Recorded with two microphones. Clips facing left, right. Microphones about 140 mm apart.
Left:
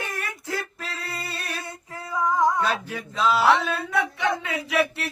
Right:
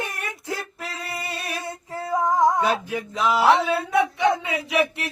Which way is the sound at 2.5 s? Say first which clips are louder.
Right 3 dB; 15° right (ahead or behind).